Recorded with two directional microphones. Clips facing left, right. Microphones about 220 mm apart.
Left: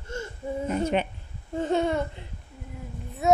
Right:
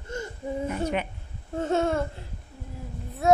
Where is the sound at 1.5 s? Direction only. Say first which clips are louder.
Even; 5° right (ahead or behind).